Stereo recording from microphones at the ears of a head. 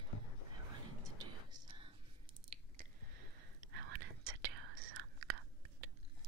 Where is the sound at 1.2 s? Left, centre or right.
Right.